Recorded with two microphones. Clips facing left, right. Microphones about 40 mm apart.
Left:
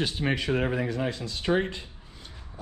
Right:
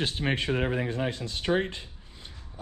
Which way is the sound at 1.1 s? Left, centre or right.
Right.